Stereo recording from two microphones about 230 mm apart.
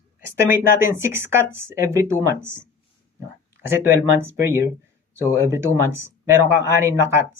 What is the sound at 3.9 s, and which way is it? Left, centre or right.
Speech, centre.